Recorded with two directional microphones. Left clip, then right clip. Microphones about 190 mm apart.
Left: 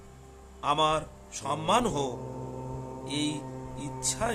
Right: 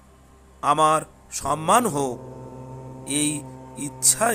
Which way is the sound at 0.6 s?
30° right (ahead or behind).